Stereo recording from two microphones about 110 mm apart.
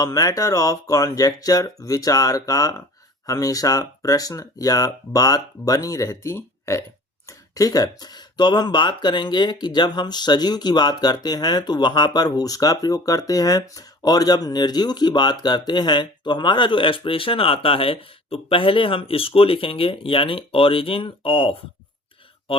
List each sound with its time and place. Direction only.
0.0 s speech: 30° left (ahead or behind); by 21.6 s 55° left (ahead or behind)